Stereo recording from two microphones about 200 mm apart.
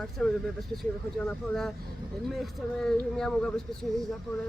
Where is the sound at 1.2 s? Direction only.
Centre (ahead or behind).